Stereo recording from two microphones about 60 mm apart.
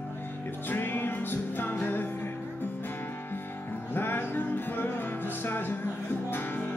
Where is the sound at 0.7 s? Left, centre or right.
Left.